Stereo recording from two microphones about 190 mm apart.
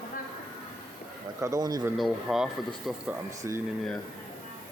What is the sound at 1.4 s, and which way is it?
Speech, 15° right (ahead or behind).